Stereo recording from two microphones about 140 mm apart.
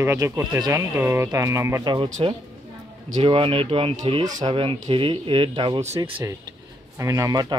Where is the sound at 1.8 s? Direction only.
35° right (ahead or behind).